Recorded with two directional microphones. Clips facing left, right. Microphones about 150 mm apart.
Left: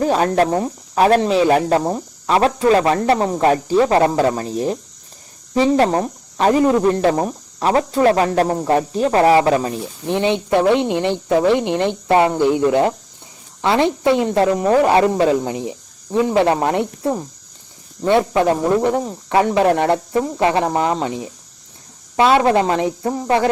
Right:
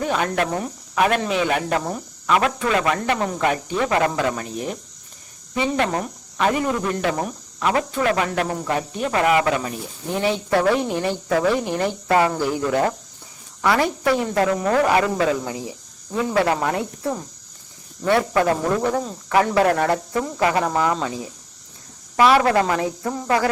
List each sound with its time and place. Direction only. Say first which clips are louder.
0.0 s speech: left 6 dB; 35° left (ahead or behind)